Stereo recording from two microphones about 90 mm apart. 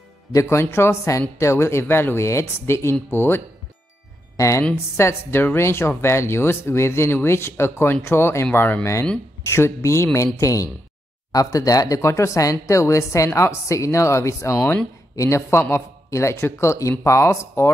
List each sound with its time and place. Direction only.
0.3 s a woman's voice: 30° left (ahead or behind)